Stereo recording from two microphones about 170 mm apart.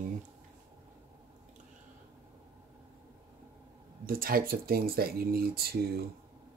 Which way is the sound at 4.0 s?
55° right (ahead or behind).